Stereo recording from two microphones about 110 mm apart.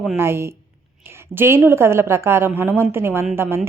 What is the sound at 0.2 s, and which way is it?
Speech, 20° right (ahead or behind).